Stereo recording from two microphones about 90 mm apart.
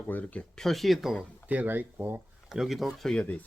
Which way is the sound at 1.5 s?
20° right (ahead or behind).